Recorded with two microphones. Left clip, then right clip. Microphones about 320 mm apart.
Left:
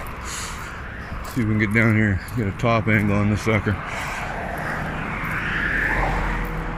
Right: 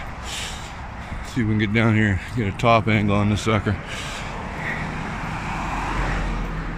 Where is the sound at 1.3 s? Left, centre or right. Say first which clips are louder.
Left 1 dB; centre.